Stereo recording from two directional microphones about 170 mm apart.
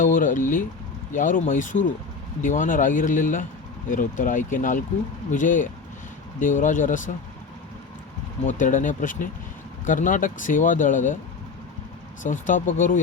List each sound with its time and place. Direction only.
0.0 s a sound: 50° left (ahead or behind)
1.1 s speech: 50° left (ahead or behind)
8.4 s speech: 50° left (ahead or behind)
12.2 s speech: 50° left (ahead or behind)